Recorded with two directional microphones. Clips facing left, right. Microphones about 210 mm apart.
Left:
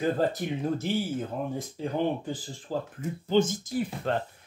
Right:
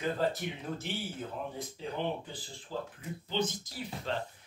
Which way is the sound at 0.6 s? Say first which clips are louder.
Left 10 dB; 40° left (ahead or behind).